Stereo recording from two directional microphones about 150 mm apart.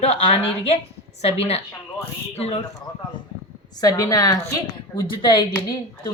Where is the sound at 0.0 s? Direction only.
40° left (ahead or behind).